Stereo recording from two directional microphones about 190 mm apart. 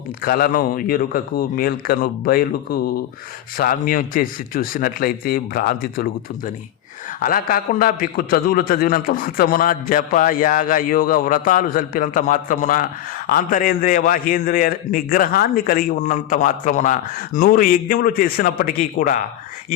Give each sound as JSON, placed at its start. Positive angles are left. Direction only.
{"t": 0.2, "sound": "a man's voice", "side_deg": 50}